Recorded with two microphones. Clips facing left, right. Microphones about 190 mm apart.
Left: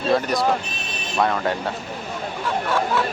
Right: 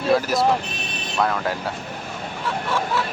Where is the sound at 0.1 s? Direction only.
5° right (ahead or behind).